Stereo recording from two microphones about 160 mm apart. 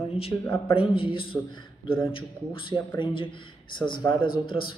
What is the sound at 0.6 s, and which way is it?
Speech, 35° left (ahead or behind).